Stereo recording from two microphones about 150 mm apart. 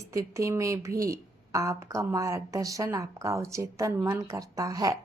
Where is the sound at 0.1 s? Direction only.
20° right (ahead or behind).